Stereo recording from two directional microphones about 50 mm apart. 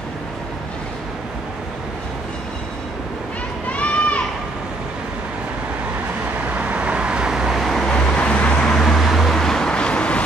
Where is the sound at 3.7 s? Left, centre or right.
Left.